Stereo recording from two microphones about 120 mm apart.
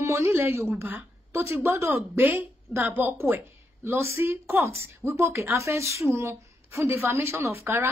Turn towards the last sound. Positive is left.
turn(degrees=-20)  # may be behind; listen again after turning